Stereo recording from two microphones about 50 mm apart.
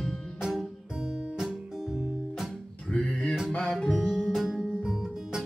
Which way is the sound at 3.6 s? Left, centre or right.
Centre.